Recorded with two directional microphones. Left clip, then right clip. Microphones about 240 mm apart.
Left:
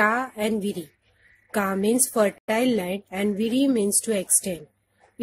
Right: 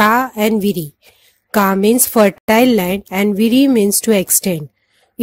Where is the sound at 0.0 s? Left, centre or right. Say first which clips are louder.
Right 10 dB; right.